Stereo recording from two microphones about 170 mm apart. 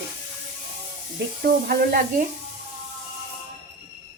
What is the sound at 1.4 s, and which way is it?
Speech, 60° right (ahead or behind).